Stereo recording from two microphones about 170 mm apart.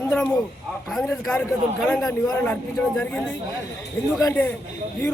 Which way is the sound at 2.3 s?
10° left (ahead or behind).